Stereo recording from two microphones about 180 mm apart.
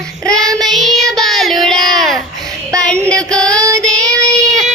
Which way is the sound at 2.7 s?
20° right (ahead or behind).